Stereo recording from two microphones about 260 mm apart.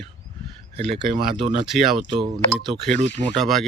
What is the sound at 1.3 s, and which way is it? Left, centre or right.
Speech, right.